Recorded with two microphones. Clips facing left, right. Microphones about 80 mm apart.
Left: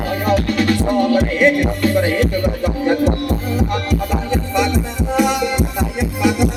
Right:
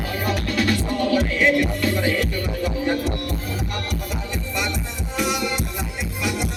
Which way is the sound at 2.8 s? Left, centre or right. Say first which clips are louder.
Left 11 dB; left.